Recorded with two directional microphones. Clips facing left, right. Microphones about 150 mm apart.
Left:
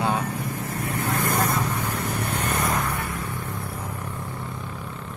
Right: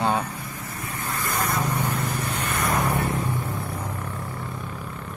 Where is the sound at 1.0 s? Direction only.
60° left (ahead or behind).